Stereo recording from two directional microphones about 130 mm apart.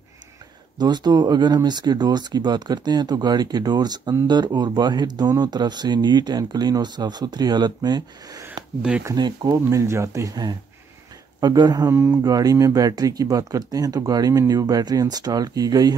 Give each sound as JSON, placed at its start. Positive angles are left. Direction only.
{"t": 0.7, "sound": "speech", "side_deg": -35}